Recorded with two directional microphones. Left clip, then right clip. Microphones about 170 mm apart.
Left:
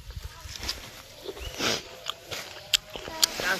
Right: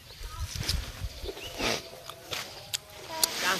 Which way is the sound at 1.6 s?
50° left (ahead or behind).